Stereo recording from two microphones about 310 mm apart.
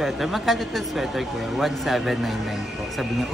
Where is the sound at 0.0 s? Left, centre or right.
Centre.